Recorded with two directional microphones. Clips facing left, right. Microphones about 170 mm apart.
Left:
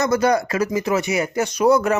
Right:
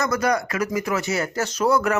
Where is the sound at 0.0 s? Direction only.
25° left (ahead or behind).